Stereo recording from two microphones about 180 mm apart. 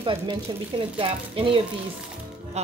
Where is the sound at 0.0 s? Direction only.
25° right (ahead or behind).